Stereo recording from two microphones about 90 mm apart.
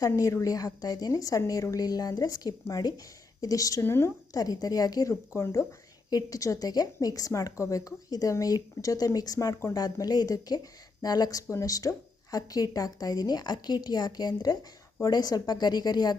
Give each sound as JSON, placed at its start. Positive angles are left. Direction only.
{"t": 0.0, "sound": "speech", "side_deg": 40}
{"t": 4.4, "sound": "speech", "side_deg": 45}
{"t": 6.1, "sound": "speech", "side_deg": 40}
{"t": 9.7, "sound": "a woman's voice", "side_deg": 45}